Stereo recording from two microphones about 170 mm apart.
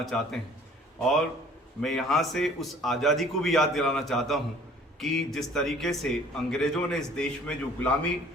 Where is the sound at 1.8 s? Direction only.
Centre (ahead or behind).